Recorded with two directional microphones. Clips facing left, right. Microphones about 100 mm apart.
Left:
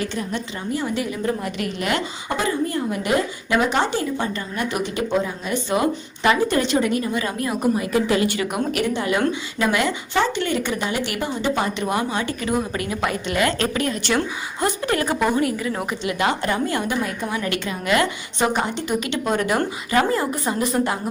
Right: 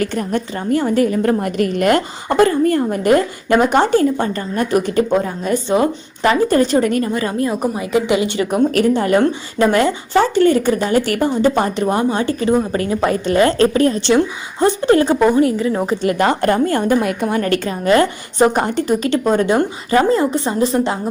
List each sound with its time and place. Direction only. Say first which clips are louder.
0.0 s a woman's voice: right 7 dB; 50° right (ahead or behind)
5.6 s speech: right 3 dB; 30° right (ahead or behind)
7.3 s a woman's voice: right 3 dB; 25° right (ahead or behind)
8.5 s a woman's voice: right 8 dB; 40° right (ahead or behind)
16.0 s a woman's voice: right 6 dB; 45° right (ahead or behind)
17.0 s a woman's voice: right 7 dB; 70° right (ahead or behind); by 20.9 s 25° right (ahead or behind)